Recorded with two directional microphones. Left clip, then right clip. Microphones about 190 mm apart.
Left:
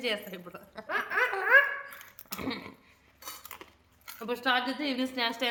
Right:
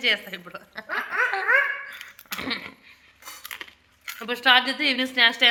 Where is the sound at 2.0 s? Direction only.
10° left (ahead or behind).